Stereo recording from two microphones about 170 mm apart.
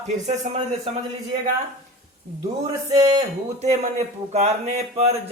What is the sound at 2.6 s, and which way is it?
Speech, 20° right (ahead or behind).